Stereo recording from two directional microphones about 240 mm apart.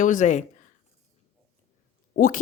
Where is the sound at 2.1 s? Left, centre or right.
Left.